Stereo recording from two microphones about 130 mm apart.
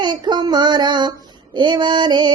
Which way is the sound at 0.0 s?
35° right (ahead or behind).